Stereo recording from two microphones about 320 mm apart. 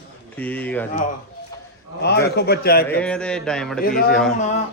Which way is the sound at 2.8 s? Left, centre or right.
Centre.